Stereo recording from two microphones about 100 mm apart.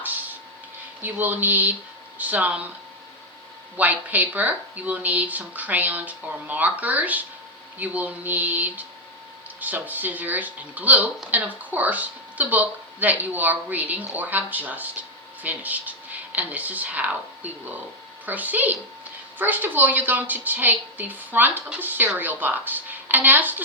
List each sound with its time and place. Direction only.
0.0 s a sound: 15° right (ahead or behind)
1.0 s a woman's voice: 20° right (ahead or behind)
3.8 s a woman's voice: 15° right (ahead or behind)